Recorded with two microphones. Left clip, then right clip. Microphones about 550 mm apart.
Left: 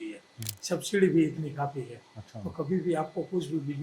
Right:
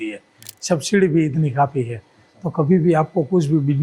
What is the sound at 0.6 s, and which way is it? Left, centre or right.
Speech, right.